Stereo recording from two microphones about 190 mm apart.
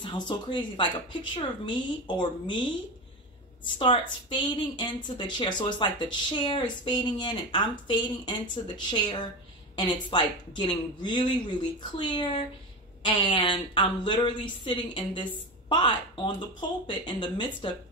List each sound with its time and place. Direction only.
0.0 s speech: 25° left (ahead or behind)